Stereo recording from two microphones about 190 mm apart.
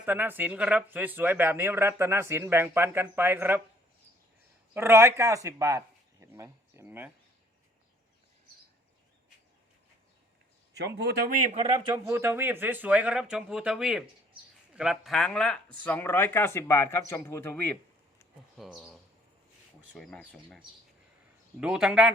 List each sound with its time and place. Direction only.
0.0 s speech: 10° right (ahead or behind)
4.7 s speech: 15° right (ahead or behind)
10.8 s speech: 65° right (ahead or behind); by 11.6 s 45° right (ahead or behind)
11.6 s speech: 25° right (ahead or behind)
12.1 s speech: 15° right (ahead or behind); by 17.7 s 10° left (ahead or behind)
18.5 s speech: centre (ahead or behind)
20.0 s speech: 5° left (ahead or behind)
21.6 s speech: 5° right (ahead or behind)